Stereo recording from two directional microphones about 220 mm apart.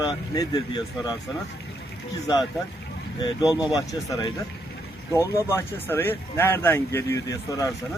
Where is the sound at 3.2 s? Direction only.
20° left (ahead or behind).